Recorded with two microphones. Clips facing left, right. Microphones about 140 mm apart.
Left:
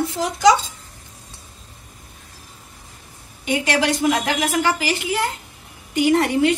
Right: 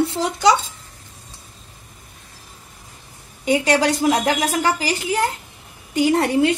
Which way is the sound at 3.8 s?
40° right (ahead or behind).